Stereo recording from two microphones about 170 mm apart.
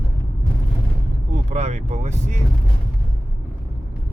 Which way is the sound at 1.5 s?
40° right (ahead or behind).